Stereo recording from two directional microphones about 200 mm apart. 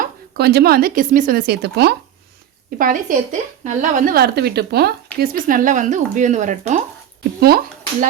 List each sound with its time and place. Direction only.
0.0 s speech: 55° right (ahead or behind); by 6.8 s 35° right (ahead or behind)
7.3 s speech: 50° right (ahead or behind)